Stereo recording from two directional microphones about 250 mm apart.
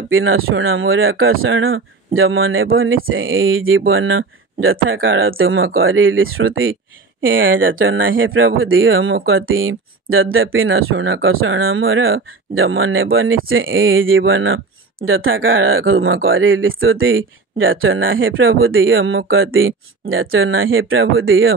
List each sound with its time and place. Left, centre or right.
0.1 s speech: right